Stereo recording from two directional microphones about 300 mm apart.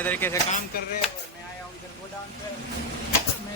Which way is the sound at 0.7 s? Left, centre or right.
Left.